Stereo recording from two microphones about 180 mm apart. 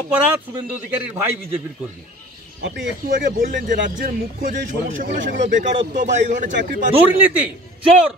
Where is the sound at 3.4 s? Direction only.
50° right (ahead or behind).